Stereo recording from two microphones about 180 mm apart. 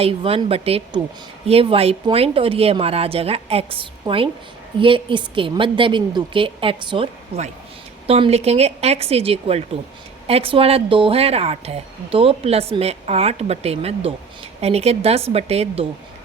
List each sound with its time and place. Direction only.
0.0 s a woman's voice: 30° right (ahead or behind)